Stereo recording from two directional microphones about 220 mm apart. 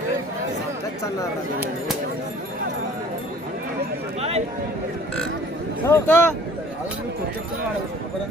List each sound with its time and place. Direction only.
4.2 s speech: 30° right (ahead or behind)
5.9 s speech: 10° left (ahead or behind)